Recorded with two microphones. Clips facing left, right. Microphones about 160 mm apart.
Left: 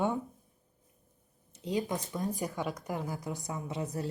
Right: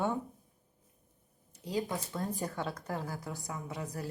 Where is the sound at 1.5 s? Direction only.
20° left (ahead or behind).